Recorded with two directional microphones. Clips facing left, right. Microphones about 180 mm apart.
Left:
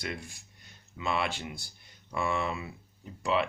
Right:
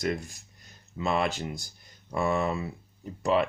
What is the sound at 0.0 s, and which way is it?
Speech, 40° right (ahead or behind).